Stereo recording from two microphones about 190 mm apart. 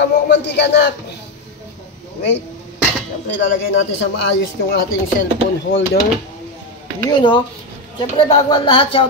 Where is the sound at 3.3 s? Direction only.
80° left.